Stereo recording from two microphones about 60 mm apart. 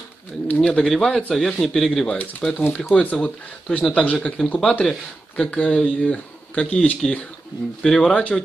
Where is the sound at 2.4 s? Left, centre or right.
Centre.